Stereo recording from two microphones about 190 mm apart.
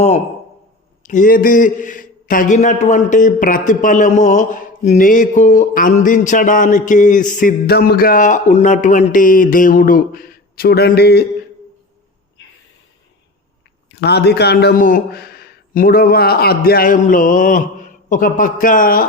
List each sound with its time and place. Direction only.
1.0 s a man's voice: 45° left (ahead or behind)
13.9 s a man's voice: 60° left (ahead or behind)